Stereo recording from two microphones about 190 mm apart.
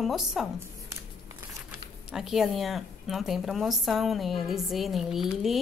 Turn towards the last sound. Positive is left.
turn(degrees=0)  # may be behind; listen again after turning